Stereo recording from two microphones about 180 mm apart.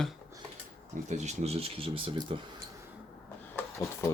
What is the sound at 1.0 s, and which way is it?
Speech, 40° right (ahead or behind).